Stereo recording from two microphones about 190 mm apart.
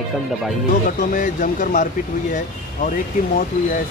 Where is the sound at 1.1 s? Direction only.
45° left (ahead or behind).